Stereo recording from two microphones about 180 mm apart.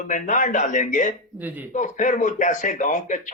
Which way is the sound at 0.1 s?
45° left (ahead or behind).